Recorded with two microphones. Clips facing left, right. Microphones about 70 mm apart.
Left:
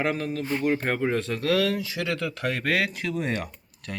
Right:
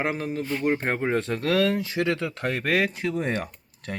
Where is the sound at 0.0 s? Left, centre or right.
Right.